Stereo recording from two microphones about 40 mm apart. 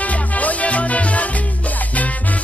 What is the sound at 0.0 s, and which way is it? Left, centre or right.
Music, left.